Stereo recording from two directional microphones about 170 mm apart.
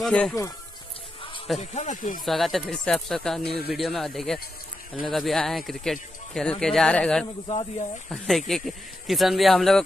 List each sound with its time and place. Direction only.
0.0 s speech: 5° left (ahead or behind)
1.6 s speech: 40° left (ahead or behind)
2.2 s speech: centre (ahead or behind)
3.4 s speech: 70° left (ahead or behind)
3.7 s speech: centre (ahead or behind)